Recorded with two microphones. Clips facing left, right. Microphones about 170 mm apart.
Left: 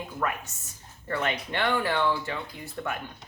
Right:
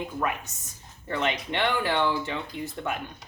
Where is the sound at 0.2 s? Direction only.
20° right (ahead or behind).